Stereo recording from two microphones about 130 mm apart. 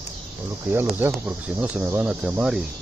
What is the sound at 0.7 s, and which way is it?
Speech, 15° right (ahead or behind).